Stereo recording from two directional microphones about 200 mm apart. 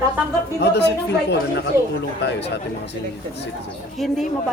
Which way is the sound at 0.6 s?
55° left (ahead or behind).